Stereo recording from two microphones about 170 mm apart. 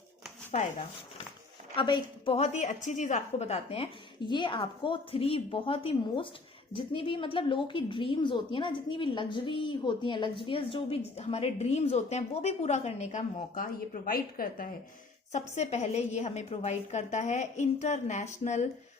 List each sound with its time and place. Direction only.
1.7 s a woman's voice: 30° left (ahead or behind); by 14.7 s 55° left (ahead or behind)
15.3 s a woman's voice: 40° left (ahead or behind)